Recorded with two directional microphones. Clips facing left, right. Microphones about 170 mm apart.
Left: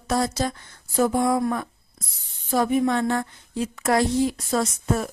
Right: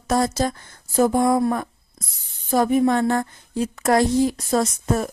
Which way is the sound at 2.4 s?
45° right (ahead or behind).